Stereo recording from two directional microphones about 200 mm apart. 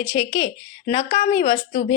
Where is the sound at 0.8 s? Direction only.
40° left (ahead or behind).